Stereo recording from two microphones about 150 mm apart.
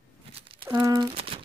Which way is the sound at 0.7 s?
25° right (ahead or behind).